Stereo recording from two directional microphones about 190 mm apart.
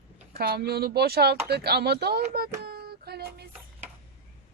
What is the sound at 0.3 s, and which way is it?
Speech, 55° right (ahead or behind).